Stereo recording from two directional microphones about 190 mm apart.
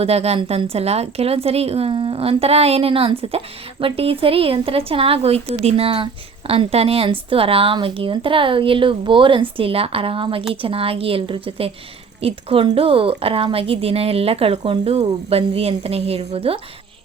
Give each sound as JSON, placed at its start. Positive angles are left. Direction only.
{"t": 0.0, "sound": "a woman's voice", "side_deg": -35}